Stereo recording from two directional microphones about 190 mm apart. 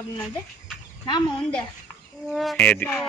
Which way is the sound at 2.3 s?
Centre (ahead or behind).